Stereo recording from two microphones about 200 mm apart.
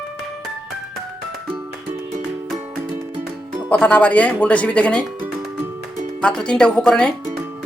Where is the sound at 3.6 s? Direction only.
5° left (ahead or behind).